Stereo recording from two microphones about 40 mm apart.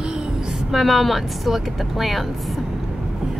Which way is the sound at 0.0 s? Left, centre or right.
Centre.